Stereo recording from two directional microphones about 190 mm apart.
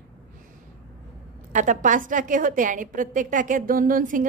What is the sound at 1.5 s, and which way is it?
A woman's voice, 40° right (ahead or behind).